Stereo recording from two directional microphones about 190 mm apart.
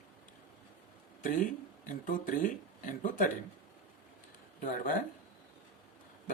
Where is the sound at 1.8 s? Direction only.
45° left (ahead or behind).